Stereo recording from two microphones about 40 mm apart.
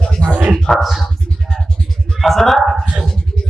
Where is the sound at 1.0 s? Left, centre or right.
Left.